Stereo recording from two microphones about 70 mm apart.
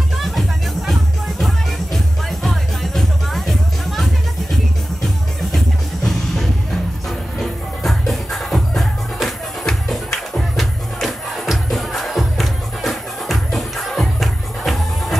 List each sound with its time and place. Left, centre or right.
0.2 s music: centre
2.4 s music: centre
6.0 s music: centre